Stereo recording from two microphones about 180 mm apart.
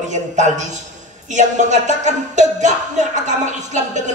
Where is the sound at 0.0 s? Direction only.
40° right (ahead or behind).